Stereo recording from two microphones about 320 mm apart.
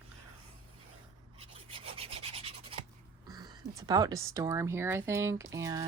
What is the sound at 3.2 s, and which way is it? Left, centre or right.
Speech, centre.